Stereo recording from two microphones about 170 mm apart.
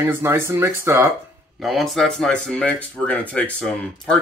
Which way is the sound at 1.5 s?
Centre (ahead or behind).